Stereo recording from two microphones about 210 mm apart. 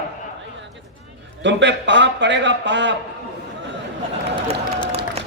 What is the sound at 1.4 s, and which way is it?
A man's voice, 60° right (ahead or behind).